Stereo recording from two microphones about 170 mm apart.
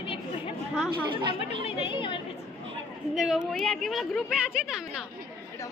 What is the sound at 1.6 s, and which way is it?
Speech, 30° left (ahead or behind).